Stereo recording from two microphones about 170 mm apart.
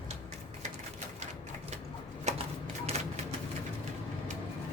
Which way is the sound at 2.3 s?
45° right (ahead or behind).